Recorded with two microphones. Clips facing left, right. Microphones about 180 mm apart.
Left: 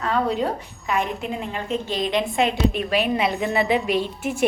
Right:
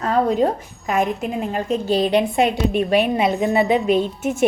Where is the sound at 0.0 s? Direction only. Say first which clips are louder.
Right 5 dB; 45° right (ahead or behind).